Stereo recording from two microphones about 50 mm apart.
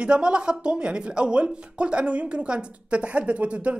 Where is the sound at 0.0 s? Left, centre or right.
Centre.